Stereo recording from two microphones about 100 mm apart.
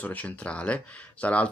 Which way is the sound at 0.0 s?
15° left (ahead or behind).